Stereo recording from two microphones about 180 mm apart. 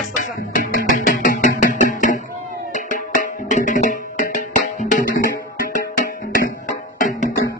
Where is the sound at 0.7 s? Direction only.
50° left (ahead or behind).